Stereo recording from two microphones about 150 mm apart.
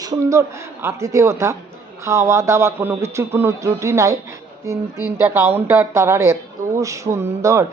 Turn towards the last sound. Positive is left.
turn(degrees=-20)  # may be behind; listen again after turning